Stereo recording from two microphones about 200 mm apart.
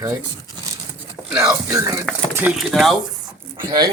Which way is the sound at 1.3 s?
15° right (ahead or behind).